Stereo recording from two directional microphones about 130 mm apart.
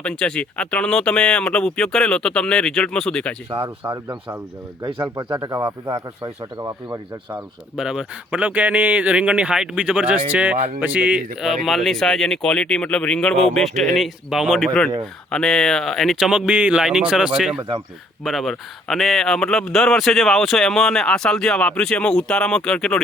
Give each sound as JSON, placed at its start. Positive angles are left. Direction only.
{"t": 0.0, "sound": "speech", "side_deg": 5}
{"t": 3.8, "sound": "speech", "side_deg": -35}
{"t": 5.5, "sound": "speech", "side_deg": -15}
{"t": 6.2, "sound": "speech", "side_deg": -30}
{"t": 7.8, "sound": "speech", "side_deg": -5}
{"t": 11.3, "sound": "speech", "side_deg": 0}
{"t": 17.6, "sound": "speech", "side_deg": -35}
{"t": 18.2, "sound": "speech", "side_deg": 0}